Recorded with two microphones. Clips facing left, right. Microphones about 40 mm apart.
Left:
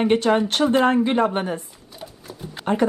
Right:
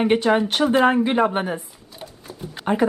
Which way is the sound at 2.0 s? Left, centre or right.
Centre.